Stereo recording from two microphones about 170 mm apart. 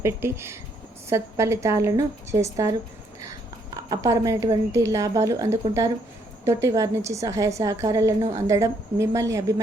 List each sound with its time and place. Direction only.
0.0 s a woman's voice: 15° right (ahead or behind)
3.8 s a woman's voice: 20° right (ahead or behind)